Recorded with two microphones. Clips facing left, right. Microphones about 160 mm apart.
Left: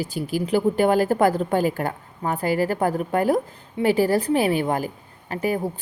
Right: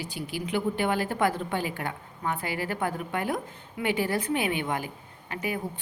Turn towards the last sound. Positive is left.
turn(degrees=40)  # may be behind; listen again after turning